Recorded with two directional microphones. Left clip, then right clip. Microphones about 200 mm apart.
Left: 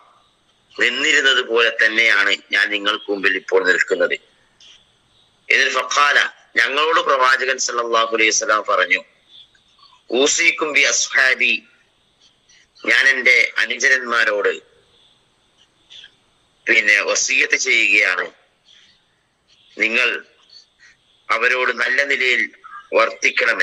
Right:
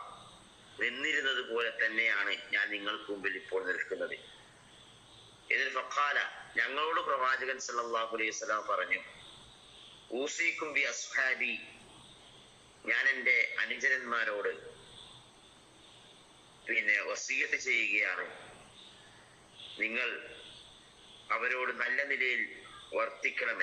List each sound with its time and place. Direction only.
0.8 s a man's voice: 55° left (ahead or behind)
5.5 s a man's voice: 55° left (ahead or behind)
10.1 s a man's voice: 50° left (ahead or behind)
12.8 s a man's voice: 50° left (ahead or behind)
16.6 s a man's voice: 55° left (ahead or behind)
19.7 s a man's voice: 55° left (ahead or behind)
21.2 s a man's voice: 50° left (ahead or behind)